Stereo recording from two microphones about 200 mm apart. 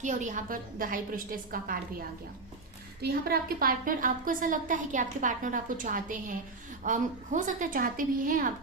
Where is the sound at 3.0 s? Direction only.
50° right (ahead or behind).